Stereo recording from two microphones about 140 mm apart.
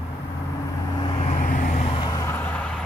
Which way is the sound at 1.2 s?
60° left (ahead or behind).